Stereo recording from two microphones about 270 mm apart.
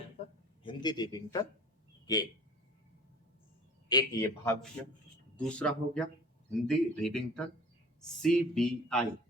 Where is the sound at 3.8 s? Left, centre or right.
Centre.